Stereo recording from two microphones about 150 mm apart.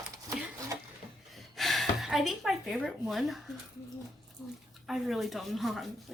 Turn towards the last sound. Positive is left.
turn(degrees=0)  # may be behind; listen again after turning